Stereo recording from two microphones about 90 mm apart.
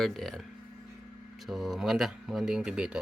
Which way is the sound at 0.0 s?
Centre (ahead or behind).